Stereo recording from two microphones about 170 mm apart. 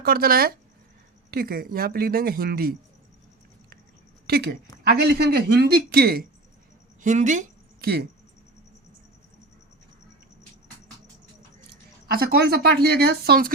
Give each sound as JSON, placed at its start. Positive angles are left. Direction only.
{"t": 0.0, "sound": "speech", "side_deg": -60}
{"t": 4.3, "sound": "a woman's voice", "side_deg": -70}
{"t": 7.0, "sound": "a woman's voice", "side_deg": -45}
{"t": 7.8, "sound": "speech", "side_deg": -65}
{"t": 11.7, "sound": "speech", "side_deg": -65}